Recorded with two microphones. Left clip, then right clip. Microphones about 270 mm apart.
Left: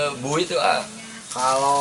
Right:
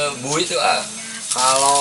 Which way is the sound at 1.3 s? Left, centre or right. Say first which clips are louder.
Right 3 dB; centre.